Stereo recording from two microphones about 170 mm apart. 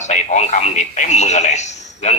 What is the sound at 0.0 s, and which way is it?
A man's voice, 45° left (ahead or behind).